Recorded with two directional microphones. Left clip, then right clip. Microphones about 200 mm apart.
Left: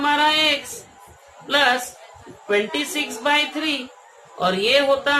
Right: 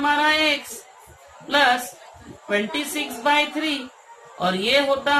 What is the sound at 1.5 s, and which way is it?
Speech, 30° left (ahead or behind).